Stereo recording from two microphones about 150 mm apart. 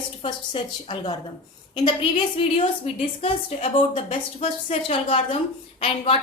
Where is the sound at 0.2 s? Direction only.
35° left (ahead or behind).